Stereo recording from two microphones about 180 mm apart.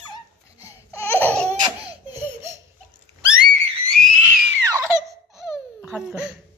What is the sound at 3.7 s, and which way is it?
Whistle, 5° left (ahead or behind).